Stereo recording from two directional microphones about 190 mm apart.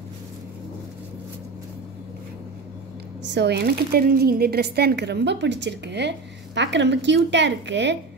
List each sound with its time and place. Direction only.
3.3 s speech: 65° right (ahead or behind)